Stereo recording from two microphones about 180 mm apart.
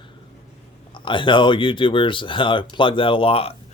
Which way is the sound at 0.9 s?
25° left (ahead or behind).